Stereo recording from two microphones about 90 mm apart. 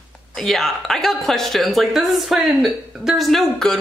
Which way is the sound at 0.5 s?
5° left (ahead or behind).